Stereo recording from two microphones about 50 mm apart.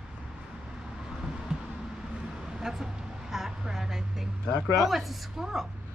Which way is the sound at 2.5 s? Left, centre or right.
Centre.